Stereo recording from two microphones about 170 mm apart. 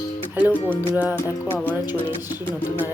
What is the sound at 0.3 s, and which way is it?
Music, 10° right (ahead or behind).